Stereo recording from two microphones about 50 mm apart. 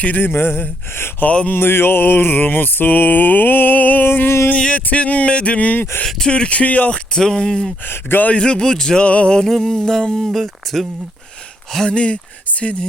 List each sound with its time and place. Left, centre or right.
0.2 s mantra: left
1.2 s speech: left
1.5 s mantra: left
4.0 s mantra: left
4.7 s speech: left
6.1 s speech: centre; by 7.0 s left
7.1 s speech: centre
9.5 s speech: centre
10.2 s speech: centre
11.9 s speech: left